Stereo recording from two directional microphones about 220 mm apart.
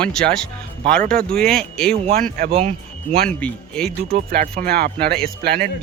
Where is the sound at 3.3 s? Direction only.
5° left (ahead or behind).